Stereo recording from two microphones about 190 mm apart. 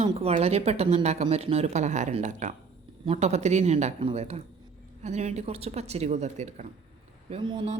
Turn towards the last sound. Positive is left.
turn(degrees=-25)  # may be behind; listen again after turning